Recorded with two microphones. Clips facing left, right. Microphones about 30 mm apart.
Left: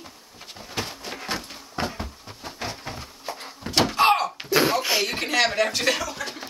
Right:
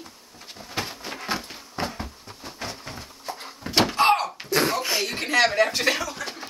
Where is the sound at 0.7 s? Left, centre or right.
Centre.